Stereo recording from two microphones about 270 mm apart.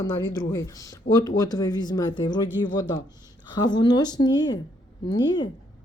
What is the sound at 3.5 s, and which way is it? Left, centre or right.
Speech, centre.